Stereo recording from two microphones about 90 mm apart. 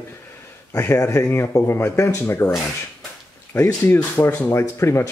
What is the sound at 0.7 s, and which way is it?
Speech, 35° left (ahead or behind).